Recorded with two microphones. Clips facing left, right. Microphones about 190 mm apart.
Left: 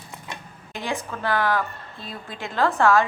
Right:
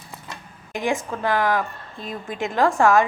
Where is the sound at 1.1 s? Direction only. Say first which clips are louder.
Left 1 dB; 15° right (ahead or behind).